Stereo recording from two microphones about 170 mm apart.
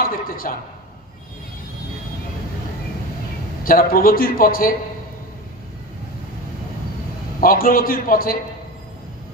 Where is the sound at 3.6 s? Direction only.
55° left (ahead or behind).